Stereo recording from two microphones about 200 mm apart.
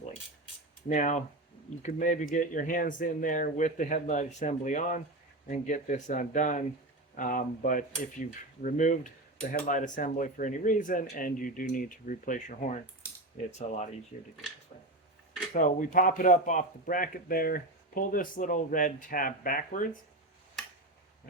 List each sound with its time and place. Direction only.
0.9 s speech: 35° left (ahead or behind)
15.5 s speech: 40° left (ahead or behind)